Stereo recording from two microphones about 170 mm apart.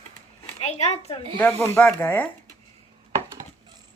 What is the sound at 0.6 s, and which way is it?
Speech, 40° left (ahead or behind).